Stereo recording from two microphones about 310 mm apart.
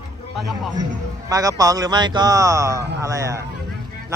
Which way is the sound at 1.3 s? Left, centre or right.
Centre.